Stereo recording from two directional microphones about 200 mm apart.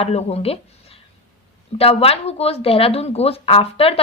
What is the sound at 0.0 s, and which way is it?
Speech, 30° left (ahead or behind).